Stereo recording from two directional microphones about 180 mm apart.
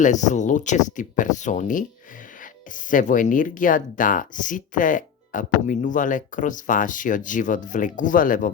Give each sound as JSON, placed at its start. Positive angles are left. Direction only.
{"t": 0.0, "sound": "speech", "side_deg": 45}
{"t": 2.9, "sound": "speech", "side_deg": 45}